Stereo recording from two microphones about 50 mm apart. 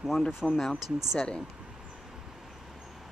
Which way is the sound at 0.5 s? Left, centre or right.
Centre.